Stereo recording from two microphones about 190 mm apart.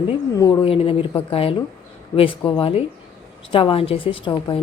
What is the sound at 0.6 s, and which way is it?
A woman's voice, 30° left (ahead or behind).